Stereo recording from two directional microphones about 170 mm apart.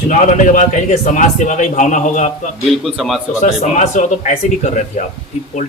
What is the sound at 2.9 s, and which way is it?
Speech, centre (ahead or behind).